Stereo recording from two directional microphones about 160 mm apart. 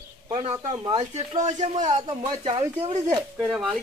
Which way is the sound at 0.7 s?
25° right (ahead or behind).